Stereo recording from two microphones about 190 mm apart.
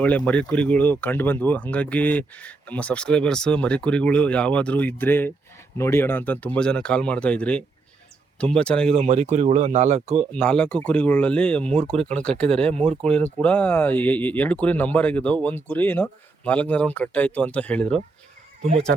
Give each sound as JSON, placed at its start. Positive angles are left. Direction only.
{"t": 0.3, "sound": "speech", "side_deg": 5}
{"t": 9.0, "sound": "speech", "side_deg": -35}
{"t": 10.3, "sound": "speech", "side_deg": 5}